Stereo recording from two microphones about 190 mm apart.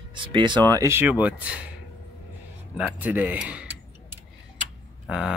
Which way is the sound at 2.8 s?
10° right (ahead or behind).